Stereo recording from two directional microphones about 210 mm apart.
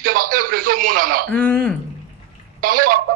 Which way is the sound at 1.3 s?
10° left (ahead or behind).